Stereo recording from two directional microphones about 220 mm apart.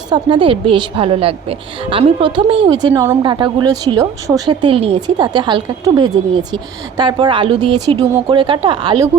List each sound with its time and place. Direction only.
0.1 s a woman's voice: 20° right (ahead or behind)